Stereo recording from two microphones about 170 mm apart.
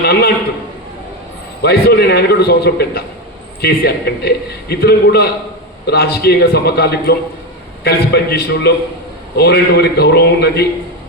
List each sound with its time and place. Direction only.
0.0 s a man's voice: 70° left (ahead or behind)
1.6 s a man's voice: 70° left (ahead or behind)